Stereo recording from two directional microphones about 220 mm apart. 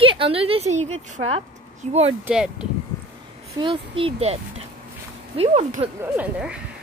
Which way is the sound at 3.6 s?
25° right (ahead or behind).